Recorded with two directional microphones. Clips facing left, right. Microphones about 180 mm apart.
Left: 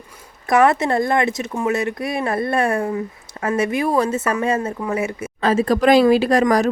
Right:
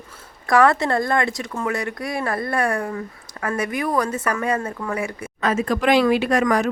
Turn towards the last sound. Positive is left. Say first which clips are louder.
# left 3 dB
turn(degrees=35)  # may be behind; listen again after turning